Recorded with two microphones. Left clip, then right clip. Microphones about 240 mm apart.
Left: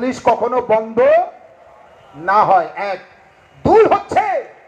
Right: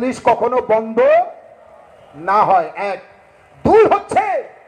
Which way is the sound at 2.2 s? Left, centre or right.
Right.